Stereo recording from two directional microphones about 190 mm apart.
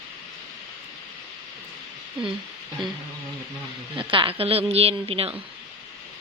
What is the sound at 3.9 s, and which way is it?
A woman's voice, 25° right (ahead or behind).